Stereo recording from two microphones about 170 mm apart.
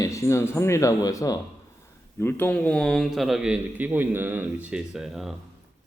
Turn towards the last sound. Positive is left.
turn(degrees=0)  # may be behind; listen again after turning